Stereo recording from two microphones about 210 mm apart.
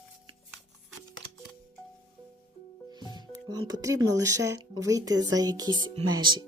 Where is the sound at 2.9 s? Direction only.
20° right (ahead or behind).